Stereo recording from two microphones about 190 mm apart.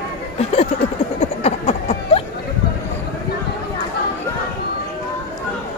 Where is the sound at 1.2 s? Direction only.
35° left (ahead or behind).